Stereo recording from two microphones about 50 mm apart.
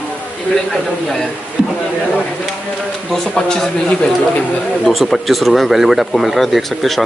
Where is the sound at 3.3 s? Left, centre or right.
Centre.